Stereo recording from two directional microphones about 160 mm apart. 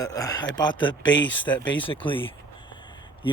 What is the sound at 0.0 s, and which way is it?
Speech, 20° left (ahead or behind).